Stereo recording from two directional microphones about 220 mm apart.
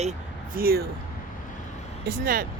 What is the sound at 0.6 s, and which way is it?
Speech, 45° right (ahead or behind).